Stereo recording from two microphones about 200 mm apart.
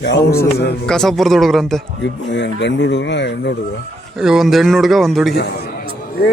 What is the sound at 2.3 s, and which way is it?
Speech, 60° left (ahead or behind).